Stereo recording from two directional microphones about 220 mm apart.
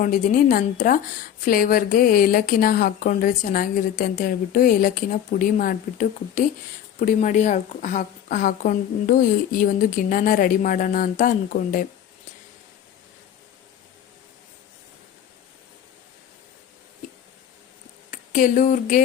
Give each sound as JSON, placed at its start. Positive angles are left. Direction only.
{"t": 0.0, "sound": "speech", "side_deg": 40}
{"t": 18.1, "sound": "speech", "side_deg": 35}